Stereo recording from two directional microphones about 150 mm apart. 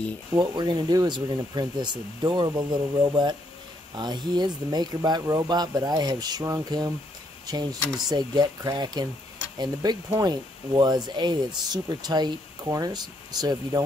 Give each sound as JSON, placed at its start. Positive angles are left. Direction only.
{"t": 0.4, "sound": "speech", "side_deg": -30}